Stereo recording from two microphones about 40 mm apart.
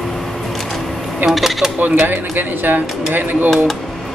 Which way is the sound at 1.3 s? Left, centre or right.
Centre.